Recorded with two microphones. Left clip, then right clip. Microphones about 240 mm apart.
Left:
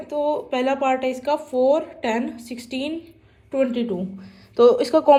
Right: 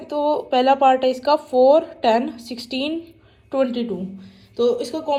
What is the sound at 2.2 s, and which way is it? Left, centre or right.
A woman's voice, centre.